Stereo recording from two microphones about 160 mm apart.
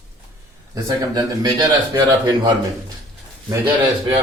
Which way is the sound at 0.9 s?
25° right (ahead or behind).